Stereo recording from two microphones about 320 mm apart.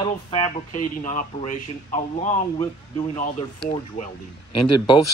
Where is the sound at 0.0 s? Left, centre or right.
Centre.